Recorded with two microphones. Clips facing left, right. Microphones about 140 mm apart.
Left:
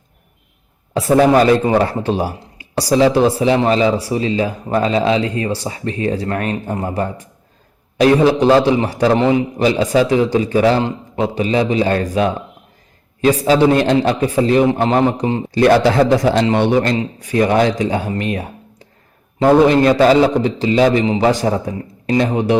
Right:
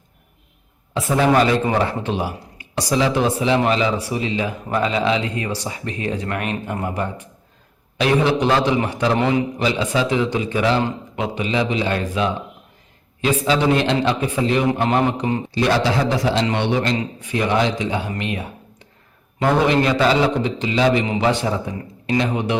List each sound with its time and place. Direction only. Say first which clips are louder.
0.9 s speech: left 5 dB; 35° left (ahead or behind)
9.6 s speech: left 9 dB; 40° left (ahead or behind)
14.7 s a man's voice: left 4 dB; 25° left (ahead or behind)
15.5 s a man's voice: left 8 dB; 55° left (ahead or behind)
18.1 s a sound: left 5 dB; 40° left (ahead or behind)
19.4 s speech: left 6 dB; 35° left (ahead or behind)